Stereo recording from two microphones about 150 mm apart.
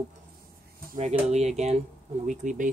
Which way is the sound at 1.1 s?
45° right (ahead or behind).